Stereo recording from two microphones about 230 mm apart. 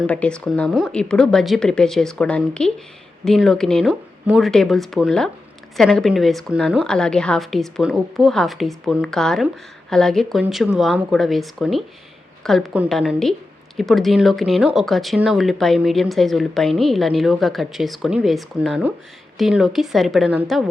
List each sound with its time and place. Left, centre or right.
0.1 s speech: centre